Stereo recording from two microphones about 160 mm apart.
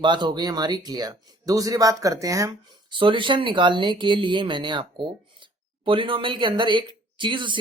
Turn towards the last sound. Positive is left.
turn(degrees=-30)  # may be behind; listen again after turning